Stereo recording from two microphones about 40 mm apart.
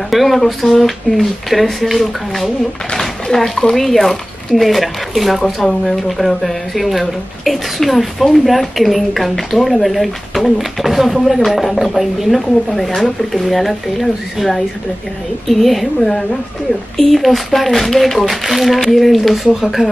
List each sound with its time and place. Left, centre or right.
0.1 s speech: centre